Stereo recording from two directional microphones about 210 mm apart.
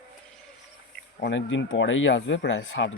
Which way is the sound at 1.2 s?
60° left (ahead or behind).